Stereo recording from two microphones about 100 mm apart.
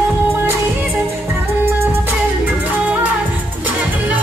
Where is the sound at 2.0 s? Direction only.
15° right (ahead or behind).